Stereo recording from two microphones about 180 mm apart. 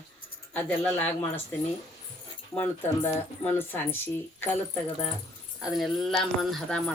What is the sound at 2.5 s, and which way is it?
Speech, 10° left (ahead or behind).